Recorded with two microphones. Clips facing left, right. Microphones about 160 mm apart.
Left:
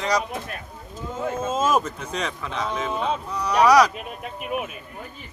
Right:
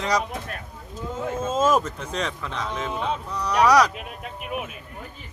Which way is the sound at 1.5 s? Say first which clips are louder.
Right 2 dB; 10° left (ahead or behind).